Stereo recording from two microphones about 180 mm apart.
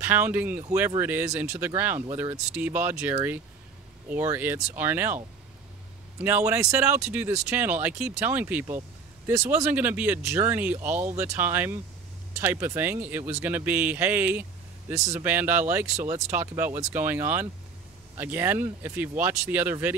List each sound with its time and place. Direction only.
0.0 s speech: 10° right (ahead or behind)
6.2 s speech: 10° right (ahead or behind)